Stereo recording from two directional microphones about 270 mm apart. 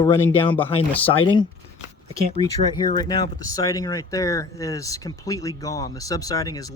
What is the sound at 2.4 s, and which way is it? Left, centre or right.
Speech, centre.